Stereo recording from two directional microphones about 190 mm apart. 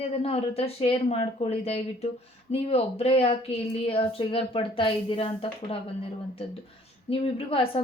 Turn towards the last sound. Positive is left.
turn(degrees=30)  # may be behind; listen again after turning